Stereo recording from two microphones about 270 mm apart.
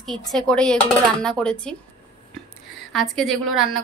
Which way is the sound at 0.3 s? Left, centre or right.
Centre.